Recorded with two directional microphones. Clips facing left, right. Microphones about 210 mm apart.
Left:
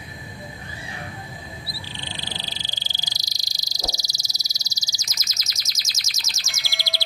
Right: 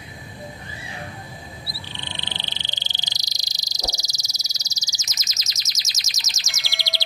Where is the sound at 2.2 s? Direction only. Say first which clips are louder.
Left 1 dB; 20° right (ahead or behind).